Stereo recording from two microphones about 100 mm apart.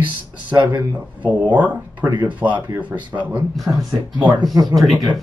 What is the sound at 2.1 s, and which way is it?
Speech, 50° right (ahead or behind).